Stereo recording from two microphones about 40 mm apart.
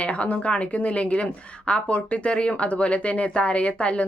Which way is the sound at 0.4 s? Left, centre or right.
Left.